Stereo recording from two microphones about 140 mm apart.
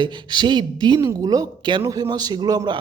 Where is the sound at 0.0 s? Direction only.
35° right (ahead or behind).